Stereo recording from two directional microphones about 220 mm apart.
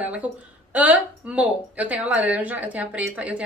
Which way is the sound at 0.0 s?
5° right (ahead or behind).